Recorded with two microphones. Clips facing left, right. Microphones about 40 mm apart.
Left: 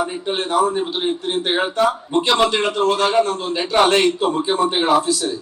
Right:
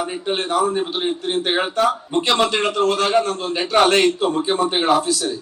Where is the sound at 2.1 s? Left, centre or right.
Left.